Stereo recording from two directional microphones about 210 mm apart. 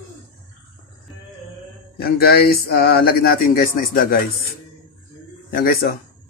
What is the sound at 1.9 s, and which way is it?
Speech, 45° left (ahead or behind).